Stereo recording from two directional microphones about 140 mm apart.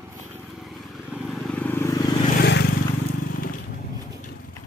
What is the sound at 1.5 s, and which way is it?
Vehicle, 15° left (ahead or behind).